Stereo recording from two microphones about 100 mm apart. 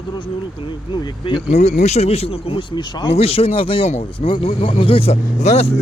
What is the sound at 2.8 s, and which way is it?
Speech, 50° left (ahead or behind).